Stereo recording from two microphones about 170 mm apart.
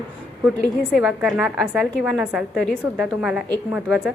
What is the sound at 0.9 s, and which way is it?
A woman's voice, 5° right (ahead or behind).